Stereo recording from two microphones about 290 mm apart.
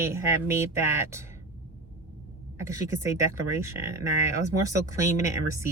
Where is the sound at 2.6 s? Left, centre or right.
Centre.